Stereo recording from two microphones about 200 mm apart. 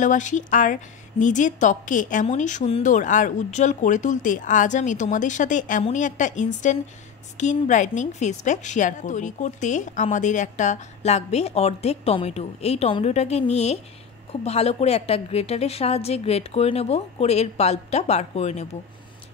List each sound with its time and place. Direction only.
0.0 s a woman's voice: 40° left (ahead or behind)